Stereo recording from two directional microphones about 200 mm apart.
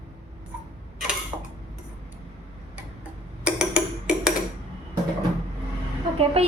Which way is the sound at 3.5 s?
5° right (ahead or behind).